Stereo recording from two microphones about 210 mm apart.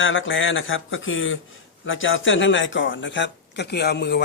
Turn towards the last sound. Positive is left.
turn(degrees=50)  # may be behind; listen again after turning